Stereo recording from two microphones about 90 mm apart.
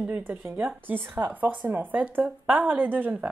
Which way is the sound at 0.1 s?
20° right (ahead or behind).